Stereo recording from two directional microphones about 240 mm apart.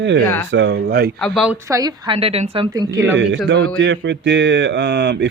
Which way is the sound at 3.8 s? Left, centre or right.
Right.